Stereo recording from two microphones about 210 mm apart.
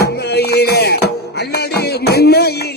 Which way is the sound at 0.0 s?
50° left (ahead or behind).